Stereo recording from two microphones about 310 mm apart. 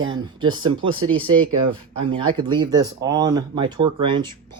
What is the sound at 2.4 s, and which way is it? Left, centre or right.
Speech, centre.